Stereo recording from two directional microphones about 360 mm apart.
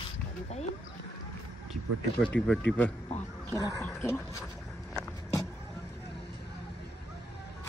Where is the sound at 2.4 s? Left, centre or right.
Centre.